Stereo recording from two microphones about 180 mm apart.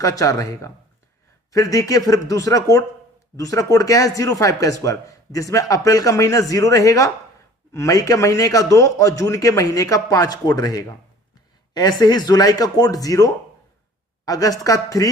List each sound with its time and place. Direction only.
0.0 s a man's voice: 20° left (ahead or behind)